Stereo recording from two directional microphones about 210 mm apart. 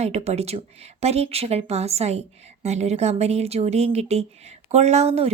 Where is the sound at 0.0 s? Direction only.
30° right (ahead or behind).